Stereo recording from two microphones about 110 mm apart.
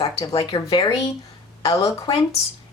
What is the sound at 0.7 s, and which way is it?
Speech, 35° left (ahead or behind).